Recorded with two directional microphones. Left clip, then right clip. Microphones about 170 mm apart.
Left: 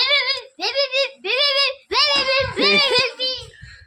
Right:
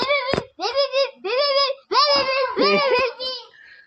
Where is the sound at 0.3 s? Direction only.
30° left (ahead or behind).